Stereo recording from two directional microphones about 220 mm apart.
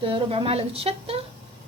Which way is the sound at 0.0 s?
25° right (ahead or behind).